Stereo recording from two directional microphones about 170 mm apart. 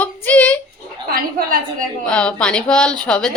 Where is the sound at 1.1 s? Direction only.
60° right (ahead or behind).